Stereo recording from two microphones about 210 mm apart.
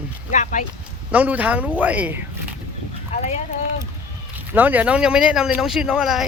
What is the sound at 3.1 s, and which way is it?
Speech, 30° left (ahead or behind).